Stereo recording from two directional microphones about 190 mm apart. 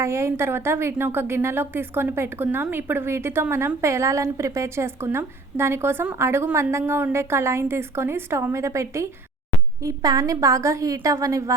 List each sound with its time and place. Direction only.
0.0 s a woman's voice: 15° right (ahead or behind)